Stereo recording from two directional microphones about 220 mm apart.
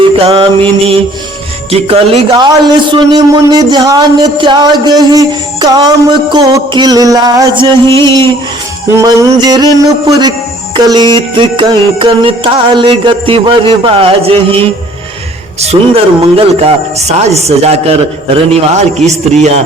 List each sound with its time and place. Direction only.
0.0 s mantra: 25° right (ahead or behind)
1.7 s a man's voice: 25° right (ahead or behind)
8.9 s music: 15° right (ahead or behind)
10.8 s a man's voice: 20° right (ahead or behind)
16.2 s a man's voice: 25° right (ahead or behind)